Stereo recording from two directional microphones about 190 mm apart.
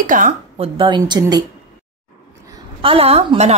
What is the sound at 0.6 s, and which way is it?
Speech, 25° right (ahead or behind).